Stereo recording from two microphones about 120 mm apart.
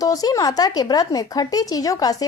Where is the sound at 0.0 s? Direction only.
30° left (ahead or behind).